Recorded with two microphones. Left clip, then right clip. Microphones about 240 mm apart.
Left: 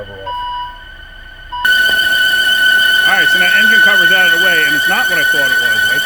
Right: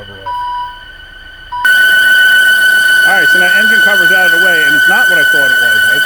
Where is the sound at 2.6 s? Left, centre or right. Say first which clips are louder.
Right 2 dB; right.